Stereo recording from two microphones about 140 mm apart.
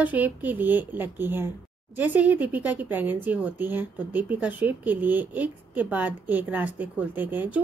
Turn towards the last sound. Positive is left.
turn(degrees=-15)  # may be behind; listen again after turning